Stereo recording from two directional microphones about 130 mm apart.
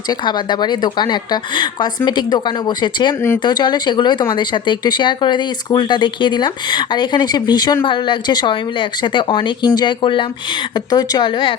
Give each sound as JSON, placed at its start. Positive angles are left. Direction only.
{"t": 0.1, "sound": "speech", "side_deg": 35}